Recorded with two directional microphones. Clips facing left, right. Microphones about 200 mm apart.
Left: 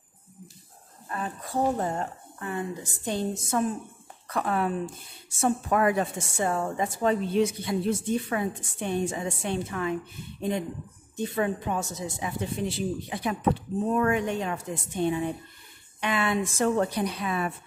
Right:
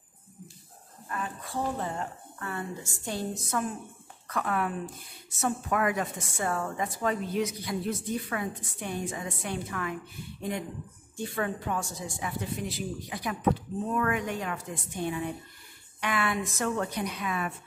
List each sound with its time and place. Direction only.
1.0 s speech: 35° left (ahead or behind)
2.3 s a woman's voice: 20° left (ahead or behind)
11.1 s a woman's voice: 20° left (ahead or behind)